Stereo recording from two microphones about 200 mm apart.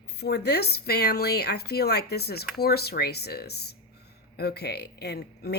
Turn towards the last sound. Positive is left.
turn(degrees=55)  # may be behind; listen again after turning